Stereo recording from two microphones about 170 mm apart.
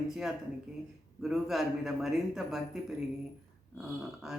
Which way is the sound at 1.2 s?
Centre (ahead or behind).